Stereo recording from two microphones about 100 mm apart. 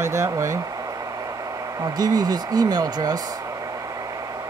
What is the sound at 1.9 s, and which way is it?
Speech, 40° right (ahead or behind).